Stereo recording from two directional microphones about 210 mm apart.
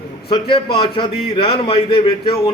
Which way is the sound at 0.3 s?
25° left (ahead or behind).